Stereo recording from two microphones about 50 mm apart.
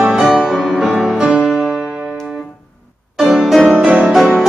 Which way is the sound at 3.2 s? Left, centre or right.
Centre.